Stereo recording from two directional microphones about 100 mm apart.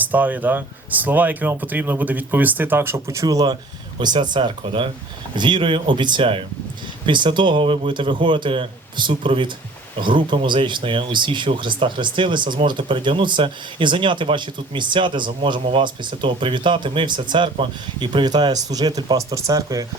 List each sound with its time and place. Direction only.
0.0 s speech: 15° right (ahead or behind); by 19.8 s 35° right (ahead or behind)